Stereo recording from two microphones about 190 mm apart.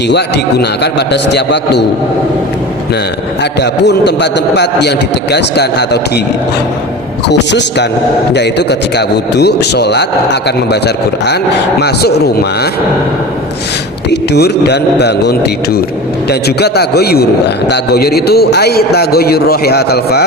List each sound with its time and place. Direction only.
0.1 s a man's voice: 60° left (ahead or behind)
3.6 s a man's voice: 60° left (ahead or behind)
7.3 s a man's voice: 65° left (ahead or behind)
14.1 s a man's voice: 60° left (ahead or behind)